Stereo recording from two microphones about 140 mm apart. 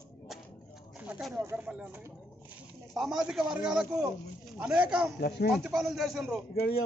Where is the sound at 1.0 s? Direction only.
10° right (ahead or behind).